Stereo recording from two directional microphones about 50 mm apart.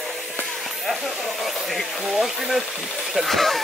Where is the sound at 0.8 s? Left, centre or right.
Centre.